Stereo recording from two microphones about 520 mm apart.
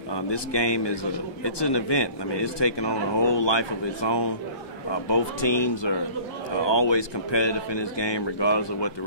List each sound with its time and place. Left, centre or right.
0.1 s speech: left